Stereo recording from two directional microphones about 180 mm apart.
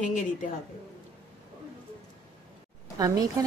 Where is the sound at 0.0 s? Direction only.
45° left (ahead or behind).